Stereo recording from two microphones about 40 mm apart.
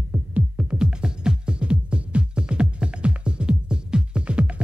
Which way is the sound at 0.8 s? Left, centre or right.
Centre.